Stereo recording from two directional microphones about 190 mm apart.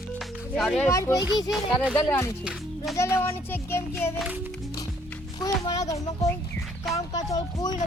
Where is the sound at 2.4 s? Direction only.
5° right (ahead or behind).